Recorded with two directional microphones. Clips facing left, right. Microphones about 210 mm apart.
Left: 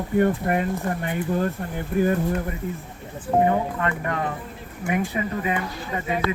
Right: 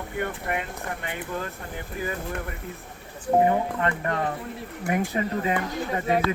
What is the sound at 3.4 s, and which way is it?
Speech, 30° right (ahead or behind).